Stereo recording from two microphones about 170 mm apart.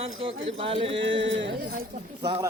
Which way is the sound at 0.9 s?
90° right.